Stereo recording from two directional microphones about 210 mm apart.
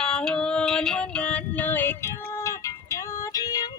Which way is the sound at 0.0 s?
5° left (ahead or behind).